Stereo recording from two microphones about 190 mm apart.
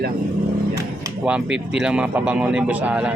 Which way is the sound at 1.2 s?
5° right (ahead or behind).